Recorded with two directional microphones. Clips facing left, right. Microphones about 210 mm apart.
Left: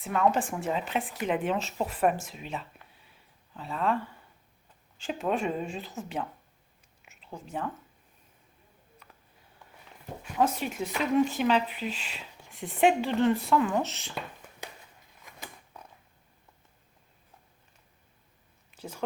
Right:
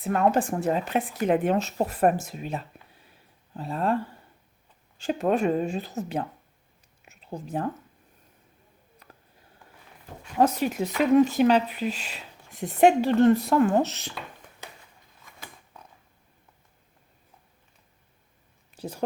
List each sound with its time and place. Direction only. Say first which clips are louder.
0.0 s a woman's voice: right 3 dB; 40° right (ahead or behind)
4.9 s speech: right 6 dB; 40° right (ahead or behind)
7.0 s whispering: right 6 dB; 40° right (ahead or behind)
10.3 s speech: right 5 dB; 40° right (ahead or behind)
18.8 s speech: right 6 dB; 35° right (ahead or behind)